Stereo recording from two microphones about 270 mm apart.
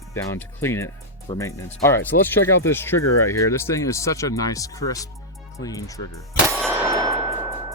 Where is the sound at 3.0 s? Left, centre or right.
Left.